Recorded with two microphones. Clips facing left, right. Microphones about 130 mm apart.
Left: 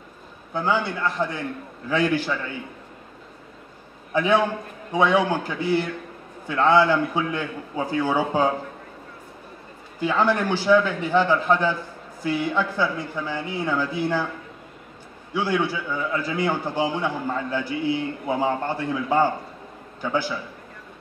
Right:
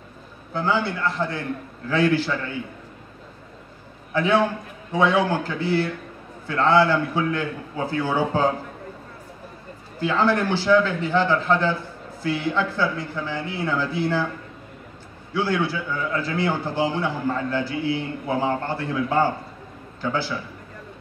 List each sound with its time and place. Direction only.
0.5 s a man's voice: 15° left (ahead or behind)
4.1 s a man's voice: 15° left (ahead or behind)
9.9 s a man's voice: 15° left (ahead or behind)
15.3 s a man's voice: 15° left (ahead or behind)